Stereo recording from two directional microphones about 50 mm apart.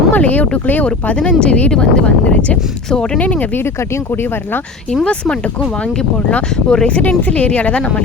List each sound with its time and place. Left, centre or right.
0.1 s speech: left
3.2 s speech: left
3.8 s speech: left
5.0 s speech: left
6.9 s speech: left